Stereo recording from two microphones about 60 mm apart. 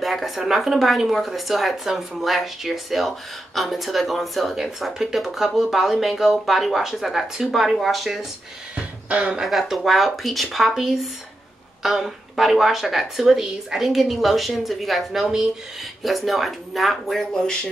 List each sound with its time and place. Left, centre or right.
0.0 s a woman's voice: centre
9.1 s speech: centre
9.4 s a woman's voice: centre